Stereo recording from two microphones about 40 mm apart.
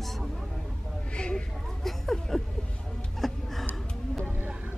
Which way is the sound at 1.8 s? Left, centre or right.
Centre.